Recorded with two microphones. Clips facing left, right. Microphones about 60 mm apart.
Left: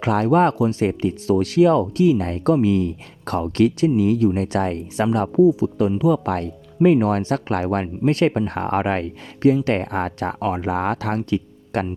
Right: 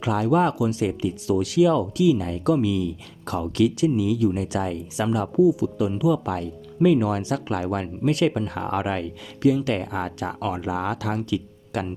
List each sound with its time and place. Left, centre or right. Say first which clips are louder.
0.0 s a man's voice: left 4 dB; left